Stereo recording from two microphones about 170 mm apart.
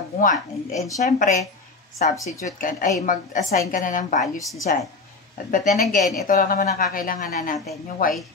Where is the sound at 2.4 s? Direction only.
50° left (ahead or behind).